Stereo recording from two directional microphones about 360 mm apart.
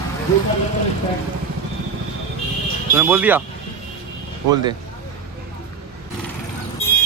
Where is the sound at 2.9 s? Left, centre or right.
Centre.